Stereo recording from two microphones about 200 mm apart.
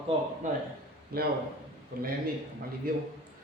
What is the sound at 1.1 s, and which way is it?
Speech, 50° right (ahead or behind).